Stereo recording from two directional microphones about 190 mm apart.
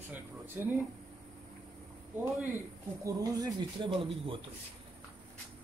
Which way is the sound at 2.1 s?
10° right (ahead or behind).